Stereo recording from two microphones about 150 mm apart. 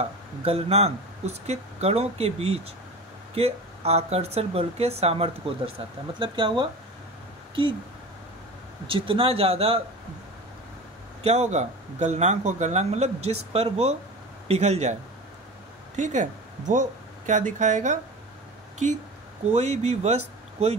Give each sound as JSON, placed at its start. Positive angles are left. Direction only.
{"t": 0.0, "sound": "speech", "side_deg": -40}
{"t": 8.8, "sound": "speech", "side_deg": -35}
{"t": 11.2, "sound": "speech", "side_deg": -50}
{"t": 16.0, "sound": "speech", "side_deg": -55}
{"t": 19.5, "sound": "speech", "side_deg": -45}